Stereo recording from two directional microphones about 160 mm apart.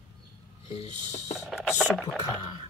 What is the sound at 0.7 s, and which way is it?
Music, 40° left (ahead or behind).